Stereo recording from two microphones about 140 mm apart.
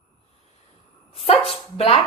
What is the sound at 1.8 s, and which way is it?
Speech, 45° left (ahead or behind).